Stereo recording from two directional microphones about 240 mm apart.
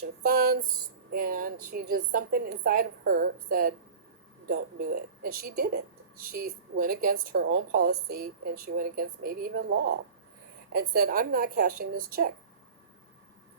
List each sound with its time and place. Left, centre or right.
0.0 s a woman's voice: right